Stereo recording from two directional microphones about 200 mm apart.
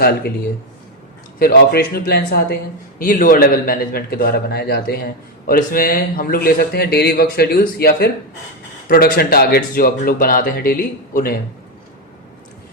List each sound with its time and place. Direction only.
0.0 s a man's voice: 50° left (ahead or behind)
1.4 s a man's voice: 50° left (ahead or behind)